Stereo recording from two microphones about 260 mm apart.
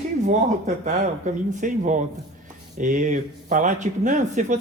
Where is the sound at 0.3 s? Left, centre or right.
Right.